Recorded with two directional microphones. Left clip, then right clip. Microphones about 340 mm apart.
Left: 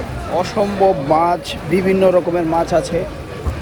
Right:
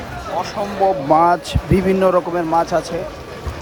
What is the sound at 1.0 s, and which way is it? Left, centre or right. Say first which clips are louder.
A man's voice: right 1 dB; right.